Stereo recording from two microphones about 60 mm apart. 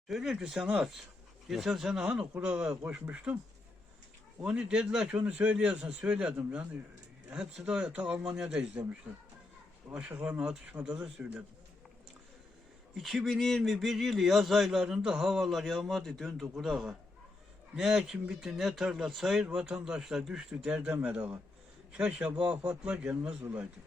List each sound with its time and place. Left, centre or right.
0.1 s speech: centre
2.1 s speech: centre
4.4 s a man's voice: centre
7.7 s speech: centre
9.1 s speech: right
9.9 s a man's voice: centre
12.9 s speech: centre
20.7 s a man's voice: right
21.9 s a man's voice: centre